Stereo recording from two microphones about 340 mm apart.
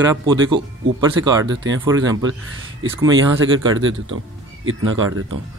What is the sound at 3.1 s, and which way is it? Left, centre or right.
Speech, right.